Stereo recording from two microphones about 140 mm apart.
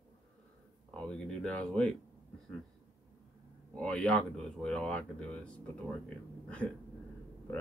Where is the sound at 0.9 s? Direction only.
5° left (ahead or behind).